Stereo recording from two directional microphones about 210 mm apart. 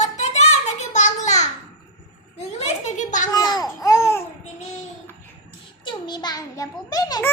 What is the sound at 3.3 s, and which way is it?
Babbling, 20° left (ahead or behind).